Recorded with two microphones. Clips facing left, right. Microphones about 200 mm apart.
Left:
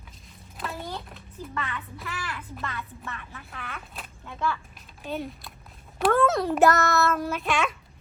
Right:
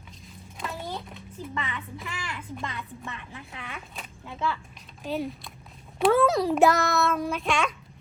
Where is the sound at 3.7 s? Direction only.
Centre (ahead or behind).